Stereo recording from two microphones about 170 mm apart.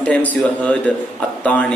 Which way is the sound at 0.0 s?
10° left (ahead or behind).